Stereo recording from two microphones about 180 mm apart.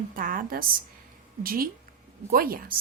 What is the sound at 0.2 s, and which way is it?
A woman's voice, 50° right (ahead or behind).